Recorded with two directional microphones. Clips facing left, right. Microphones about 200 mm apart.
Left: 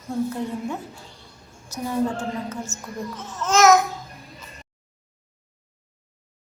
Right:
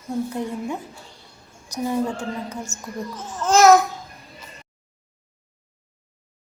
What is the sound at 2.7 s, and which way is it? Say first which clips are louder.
Speech: left 1 dB; 5° left (ahead or behind).